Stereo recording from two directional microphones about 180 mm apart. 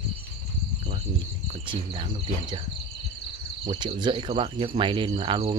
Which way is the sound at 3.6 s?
25° right (ahead or behind).